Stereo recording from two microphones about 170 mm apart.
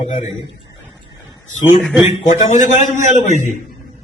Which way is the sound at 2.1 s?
45° left (ahead or behind).